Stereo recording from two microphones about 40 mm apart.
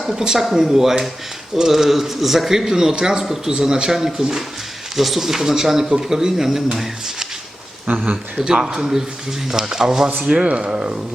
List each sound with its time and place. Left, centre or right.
0.2 s speech: centre
0.4 s speech: centre
7.9 s speech: right
8.4 s speech: right